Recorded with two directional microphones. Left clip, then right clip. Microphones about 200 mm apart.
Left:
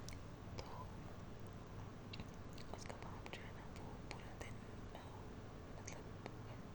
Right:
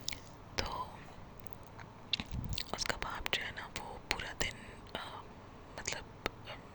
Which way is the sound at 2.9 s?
25° right (ahead or behind).